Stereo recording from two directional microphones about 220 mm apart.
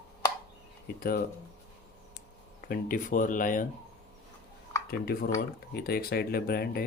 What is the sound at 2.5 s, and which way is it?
Speech, 40° left (ahead or behind).